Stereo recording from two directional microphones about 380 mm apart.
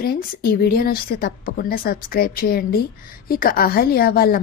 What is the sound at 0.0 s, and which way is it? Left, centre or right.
A woman's voice, left.